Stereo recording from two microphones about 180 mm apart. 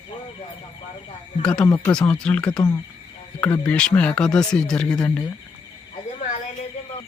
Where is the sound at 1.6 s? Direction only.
20° left (ahead or behind).